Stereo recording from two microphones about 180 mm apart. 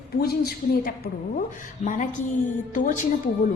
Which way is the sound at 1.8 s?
45° left (ahead or behind).